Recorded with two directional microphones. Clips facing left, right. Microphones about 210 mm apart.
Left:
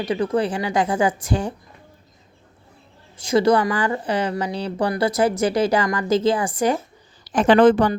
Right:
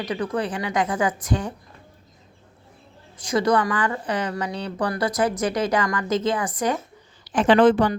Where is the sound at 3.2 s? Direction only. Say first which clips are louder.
Left 4 dB; 25° left (ahead or behind).